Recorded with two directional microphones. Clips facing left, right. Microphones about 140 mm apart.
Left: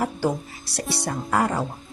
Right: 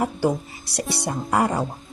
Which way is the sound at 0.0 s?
15° right (ahead or behind).